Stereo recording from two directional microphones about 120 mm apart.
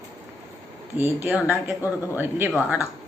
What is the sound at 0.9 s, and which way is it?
Speech, 15° right (ahead or behind).